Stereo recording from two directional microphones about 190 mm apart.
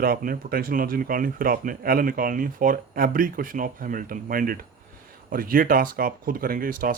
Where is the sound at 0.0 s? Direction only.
50° right (ahead or behind).